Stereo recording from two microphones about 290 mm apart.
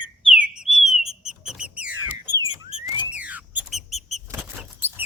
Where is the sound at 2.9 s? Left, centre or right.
Centre.